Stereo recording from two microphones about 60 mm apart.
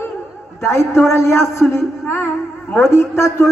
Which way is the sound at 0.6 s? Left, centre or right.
Left.